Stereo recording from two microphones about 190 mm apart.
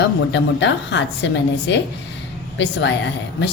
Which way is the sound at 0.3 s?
70° left (ahead or behind).